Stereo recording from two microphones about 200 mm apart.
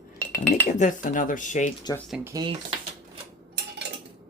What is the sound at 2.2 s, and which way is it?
Speech, 20° right (ahead or behind).